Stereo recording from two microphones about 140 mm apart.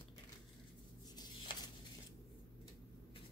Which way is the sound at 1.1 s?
30° left (ahead or behind).